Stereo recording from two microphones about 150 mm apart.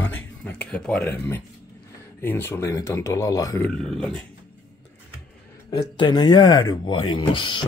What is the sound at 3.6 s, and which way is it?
Speech, 5° left (ahead or behind).